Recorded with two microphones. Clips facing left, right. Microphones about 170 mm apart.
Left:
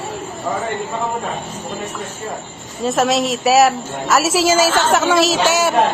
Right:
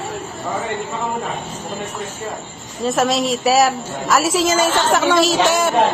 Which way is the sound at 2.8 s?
Centre (ahead or behind).